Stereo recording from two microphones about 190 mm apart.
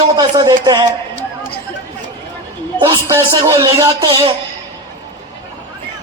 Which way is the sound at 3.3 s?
25° right (ahead or behind).